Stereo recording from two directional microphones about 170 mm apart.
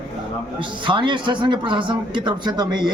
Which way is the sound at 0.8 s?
30° right (ahead or behind).